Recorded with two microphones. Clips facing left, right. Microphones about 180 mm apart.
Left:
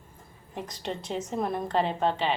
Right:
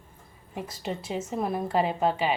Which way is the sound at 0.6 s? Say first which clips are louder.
Right 1 dB; 5° right (ahead or behind).